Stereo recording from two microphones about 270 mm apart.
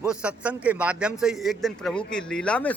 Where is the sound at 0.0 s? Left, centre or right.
Centre.